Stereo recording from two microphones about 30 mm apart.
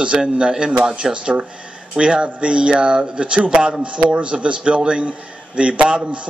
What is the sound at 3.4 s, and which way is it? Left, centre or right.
A man's voice, right.